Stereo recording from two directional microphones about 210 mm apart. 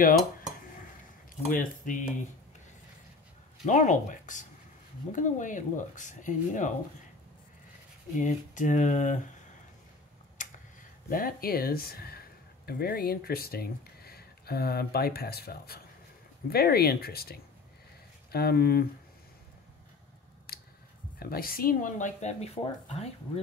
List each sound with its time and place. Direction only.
1.5 s speech: 40° left (ahead or behind)
3.6 s speech: 35° left (ahead or behind)
8.2 s speech: 35° left (ahead or behind)
11.1 s speech: 45° left (ahead or behind)
20.5 s a sound: 45° left (ahead or behind)
21.2 s speech: 45° left (ahead or behind)